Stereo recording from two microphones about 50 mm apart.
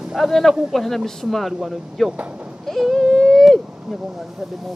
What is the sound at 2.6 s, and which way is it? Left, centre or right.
A man's voice, centre.